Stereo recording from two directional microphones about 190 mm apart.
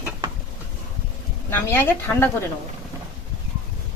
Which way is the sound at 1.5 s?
10° left (ahead or behind).